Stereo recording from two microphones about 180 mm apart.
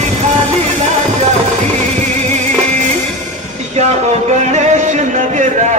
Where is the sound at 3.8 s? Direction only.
35° right (ahead or behind).